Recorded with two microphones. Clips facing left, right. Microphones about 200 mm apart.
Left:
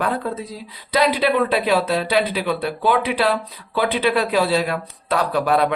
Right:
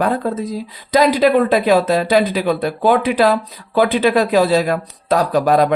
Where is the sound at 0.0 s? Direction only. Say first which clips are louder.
Right 5 dB; 45° right (ahead or behind).